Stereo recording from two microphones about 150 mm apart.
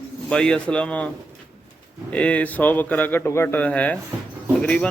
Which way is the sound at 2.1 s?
10° left (ahead or behind).